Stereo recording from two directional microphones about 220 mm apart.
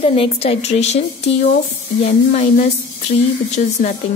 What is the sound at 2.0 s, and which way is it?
Speech, 35° left (ahead or behind).